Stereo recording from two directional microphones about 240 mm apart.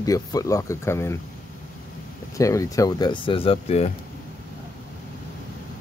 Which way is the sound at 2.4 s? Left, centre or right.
Centre.